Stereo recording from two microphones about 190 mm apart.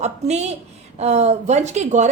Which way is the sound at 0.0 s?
35° right (ahead or behind).